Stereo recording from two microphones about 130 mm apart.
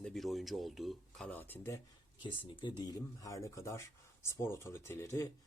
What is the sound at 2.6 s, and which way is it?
Speech, 30° left (ahead or behind).